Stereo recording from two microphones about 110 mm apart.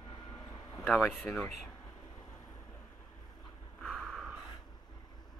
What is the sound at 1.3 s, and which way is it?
Speech, 15° left (ahead or behind).